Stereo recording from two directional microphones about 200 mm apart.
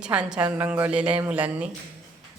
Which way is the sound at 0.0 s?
5° right (ahead or behind).